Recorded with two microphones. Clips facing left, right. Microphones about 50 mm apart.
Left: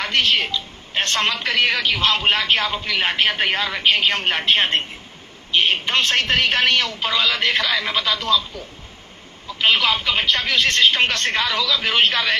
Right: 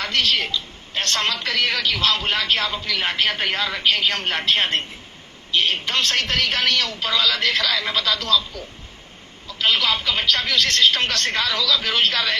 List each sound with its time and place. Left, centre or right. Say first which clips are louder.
0.0 s a woman's voice: left 2 dB; left
5.5 s a woman's voice: left 2 dB; left